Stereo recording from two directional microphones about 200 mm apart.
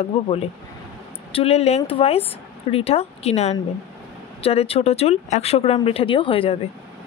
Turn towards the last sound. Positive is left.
turn(degrees=25)  # may be behind; listen again after turning